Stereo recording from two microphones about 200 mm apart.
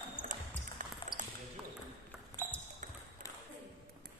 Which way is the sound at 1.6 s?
5° right (ahead or behind).